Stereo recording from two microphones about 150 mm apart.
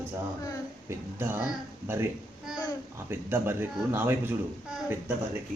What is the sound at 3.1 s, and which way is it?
Speech, 15° right (ahead or behind).